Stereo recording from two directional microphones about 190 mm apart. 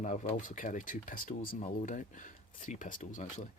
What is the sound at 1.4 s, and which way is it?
Speech, 30° left (ahead or behind).